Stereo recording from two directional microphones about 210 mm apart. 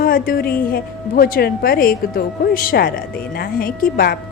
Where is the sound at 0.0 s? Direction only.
45° left (ahead or behind).